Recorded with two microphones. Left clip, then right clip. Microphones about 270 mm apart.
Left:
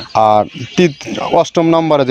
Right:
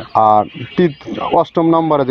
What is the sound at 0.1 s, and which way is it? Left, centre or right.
Speech, left.